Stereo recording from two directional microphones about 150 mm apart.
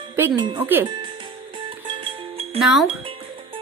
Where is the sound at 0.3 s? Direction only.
30° right (ahead or behind).